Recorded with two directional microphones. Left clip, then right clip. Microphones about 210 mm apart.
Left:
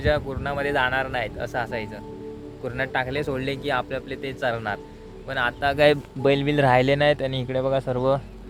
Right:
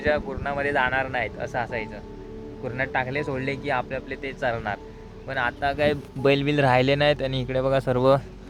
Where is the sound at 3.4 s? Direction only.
60° left (ahead or behind).